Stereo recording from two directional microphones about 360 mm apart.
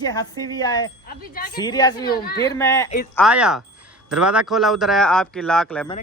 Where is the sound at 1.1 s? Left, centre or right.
Left.